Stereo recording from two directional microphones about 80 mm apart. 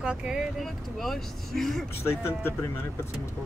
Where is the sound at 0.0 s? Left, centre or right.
Centre.